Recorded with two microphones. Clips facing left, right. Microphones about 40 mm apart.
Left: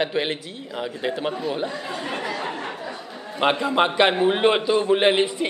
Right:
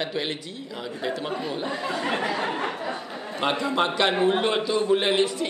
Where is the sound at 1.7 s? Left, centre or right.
Centre.